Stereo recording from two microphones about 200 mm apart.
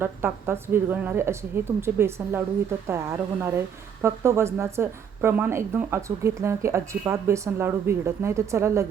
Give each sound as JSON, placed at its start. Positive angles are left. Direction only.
{"t": 0.0, "sound": "a woman's voice", "side_deg": -10}